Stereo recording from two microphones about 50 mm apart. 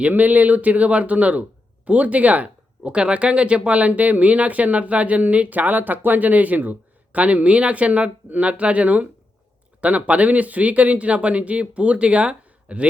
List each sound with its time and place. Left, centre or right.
0.1 s a man's voice: right